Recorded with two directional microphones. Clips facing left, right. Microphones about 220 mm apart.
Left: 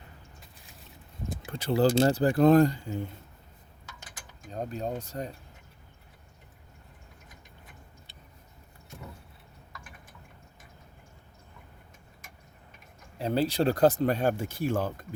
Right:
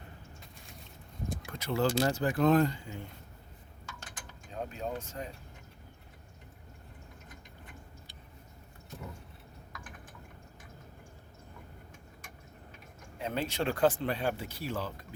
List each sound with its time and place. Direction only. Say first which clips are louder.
1.5 s speech: left 6 dB; 30° left (ahead or behind)
4.5 s speech: left 4 dB; 40° left (ahead or behind)
13.1 s speech: left 7 dB; 35° left (ahead or behind)